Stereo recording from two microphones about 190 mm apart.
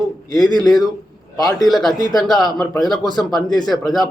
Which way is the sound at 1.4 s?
20° left (ahead or behind).